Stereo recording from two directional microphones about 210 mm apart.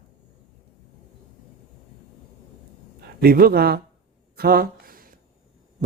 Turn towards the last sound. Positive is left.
turn(degrees=-40)  # may be behind; listen again after turning